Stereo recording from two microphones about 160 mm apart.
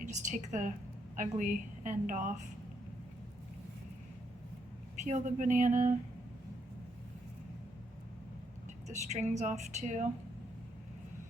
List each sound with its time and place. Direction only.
0.0 s a woman's voice: 50° right (ahead or behind)
5.0 s speech: 50° right (ahead or behind)
8.9 s speech: 45° right (ahead or behind)